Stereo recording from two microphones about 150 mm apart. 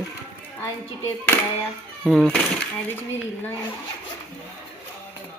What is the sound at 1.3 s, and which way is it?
Hands, 15° left (ahead or behind).